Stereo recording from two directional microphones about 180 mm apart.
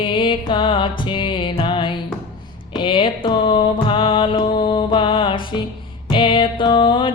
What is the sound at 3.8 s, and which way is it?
Music, 30° left (ahead or behind).